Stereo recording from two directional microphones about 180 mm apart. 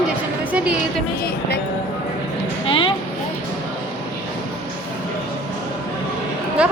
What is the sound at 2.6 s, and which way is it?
Speech, 25° left (ahead or behind).